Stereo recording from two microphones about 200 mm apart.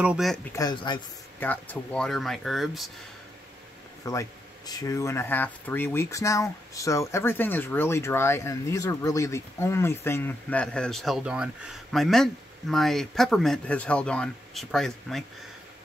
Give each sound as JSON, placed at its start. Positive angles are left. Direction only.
{"t": 0.0, "sound": "speech", "side_deg": -5}
{"t": 0.5, "sound": "speech", "side_deg": 20}
{"t": 1.4, "sound": "speech", "side_deg": 10}
{"t": 4.0, "sound": "speech", "side_deg": 15}